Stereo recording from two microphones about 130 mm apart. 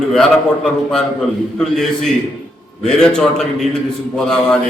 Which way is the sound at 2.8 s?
5° left (ahead or behind).